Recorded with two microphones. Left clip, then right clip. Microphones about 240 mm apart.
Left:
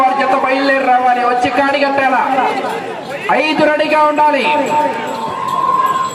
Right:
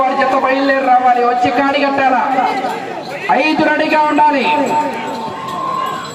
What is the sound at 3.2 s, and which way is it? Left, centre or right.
A man's voice, left.